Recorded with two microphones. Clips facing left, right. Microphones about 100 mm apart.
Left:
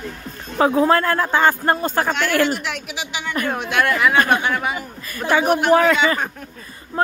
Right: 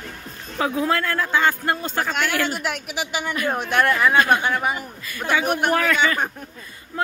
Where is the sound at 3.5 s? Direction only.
Centre (ahead or behind).